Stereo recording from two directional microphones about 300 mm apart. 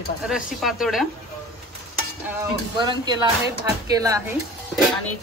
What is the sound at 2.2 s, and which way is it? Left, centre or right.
Speech, centre.